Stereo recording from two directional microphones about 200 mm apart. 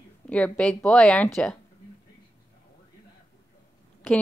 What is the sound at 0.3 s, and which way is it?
Speech, 5° left (ahead or behind).